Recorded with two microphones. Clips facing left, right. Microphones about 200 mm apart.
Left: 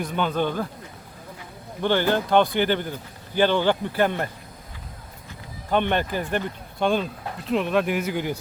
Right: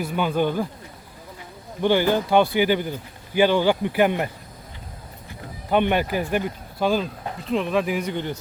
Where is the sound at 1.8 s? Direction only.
10° right (ahead or behind).